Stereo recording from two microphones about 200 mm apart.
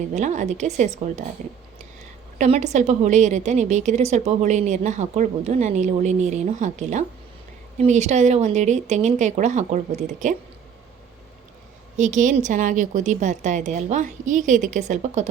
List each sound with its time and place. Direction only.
0.1 s a woman's voice: 35° right (ahead or behind)
2.4 s a woman's voice: 35° right (ahead or behind)
11.9 s a woman's voice: 40° right (ahead or behind)